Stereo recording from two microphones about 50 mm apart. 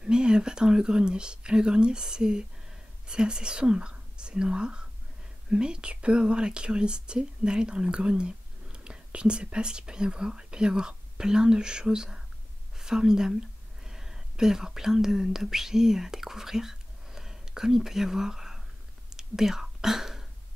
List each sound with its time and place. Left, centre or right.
0.0 s speech: centre
19.0 s whispering: centre